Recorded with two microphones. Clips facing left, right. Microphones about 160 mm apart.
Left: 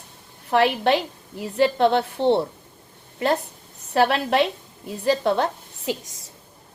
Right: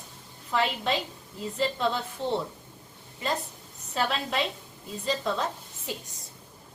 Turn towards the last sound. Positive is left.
turn(degrees=90)